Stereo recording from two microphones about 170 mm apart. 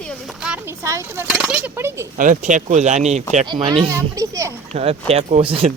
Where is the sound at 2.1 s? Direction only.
50° right (ahead or behind).